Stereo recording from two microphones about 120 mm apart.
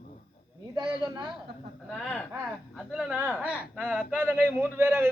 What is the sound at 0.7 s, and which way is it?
Speech, 35° right (ahead or behind).